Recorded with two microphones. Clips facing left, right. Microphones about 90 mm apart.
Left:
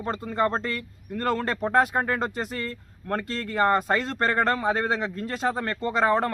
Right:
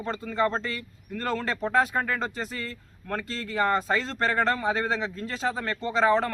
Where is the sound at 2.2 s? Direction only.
55° left (ahead or behind).